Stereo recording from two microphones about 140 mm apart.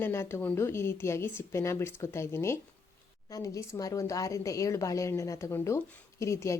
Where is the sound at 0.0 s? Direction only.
15° left (ahead or behind).